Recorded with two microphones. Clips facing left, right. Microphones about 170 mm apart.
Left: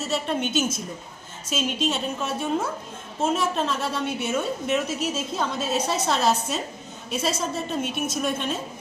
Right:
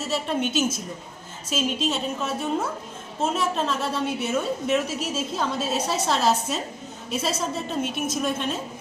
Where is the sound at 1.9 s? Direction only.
Centre (ahead or behind).